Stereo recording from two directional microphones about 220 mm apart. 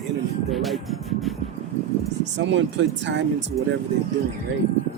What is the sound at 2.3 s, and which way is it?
Speech, 55° right (ahead or behind).